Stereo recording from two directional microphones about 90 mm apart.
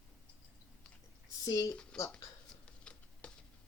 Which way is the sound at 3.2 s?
10° left (ahead or behind).